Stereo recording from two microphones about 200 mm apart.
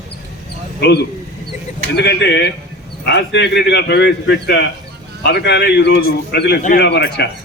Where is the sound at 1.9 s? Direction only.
55° left (ahead or behind).